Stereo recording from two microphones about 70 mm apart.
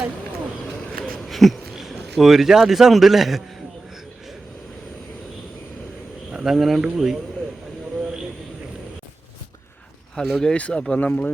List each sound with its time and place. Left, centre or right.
0.8 s a sound: centre
6.3 s speech: centre
10.2 s speech: centre
10.5 s speech: centre